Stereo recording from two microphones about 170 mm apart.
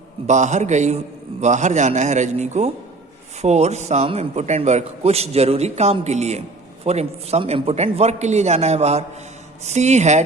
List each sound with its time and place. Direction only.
0.3 s a man's voice: 45° right (ahead or behind)